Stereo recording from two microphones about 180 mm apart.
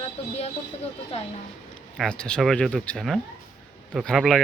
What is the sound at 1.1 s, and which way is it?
Speech, 35° left (ahead or behind).